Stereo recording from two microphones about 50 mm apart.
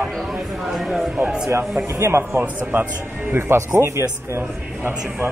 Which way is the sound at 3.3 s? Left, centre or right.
Right.